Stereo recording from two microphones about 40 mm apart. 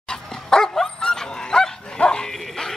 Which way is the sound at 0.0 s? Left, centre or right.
Centre.